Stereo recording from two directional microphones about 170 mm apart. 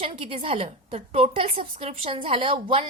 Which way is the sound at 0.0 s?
35° right (ahead or behind).